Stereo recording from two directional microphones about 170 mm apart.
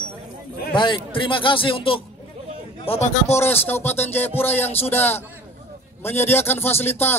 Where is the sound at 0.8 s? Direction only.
30° left (ahead or behind).